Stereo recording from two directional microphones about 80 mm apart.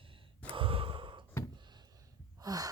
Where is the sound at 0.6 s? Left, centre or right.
Right.